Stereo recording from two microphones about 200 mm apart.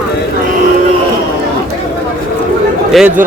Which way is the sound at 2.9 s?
Centre (ahead or behind).